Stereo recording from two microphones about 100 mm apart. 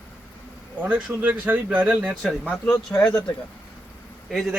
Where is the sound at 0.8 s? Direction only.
15° right (ahead or behind).